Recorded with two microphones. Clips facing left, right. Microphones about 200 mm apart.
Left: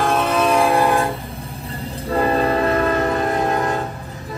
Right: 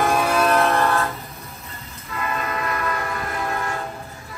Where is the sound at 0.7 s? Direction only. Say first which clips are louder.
Left 4 dB; 15° left (ahead or behind).